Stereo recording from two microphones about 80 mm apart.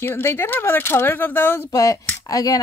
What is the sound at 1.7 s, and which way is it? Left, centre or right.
Speech, left.